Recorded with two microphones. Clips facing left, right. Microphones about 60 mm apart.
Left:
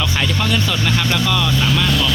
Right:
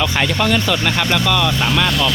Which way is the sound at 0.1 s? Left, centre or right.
Right.